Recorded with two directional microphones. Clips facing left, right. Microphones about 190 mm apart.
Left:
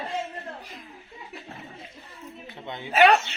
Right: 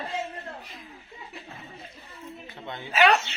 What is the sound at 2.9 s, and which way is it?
Speech, 55° left (ahead or behind).